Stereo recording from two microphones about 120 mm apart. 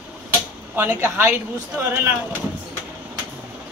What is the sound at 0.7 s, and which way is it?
Speech, 15° right (ahead or behind).